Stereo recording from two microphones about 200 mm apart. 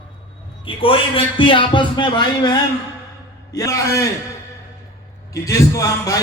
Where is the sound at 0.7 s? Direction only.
25° left (ahead or behind).